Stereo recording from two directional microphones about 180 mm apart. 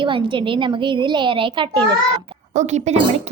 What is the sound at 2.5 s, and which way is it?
Speech, 40° right (ahead or behind).